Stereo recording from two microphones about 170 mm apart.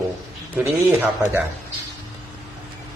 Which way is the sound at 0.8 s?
10° right (ahead or behind).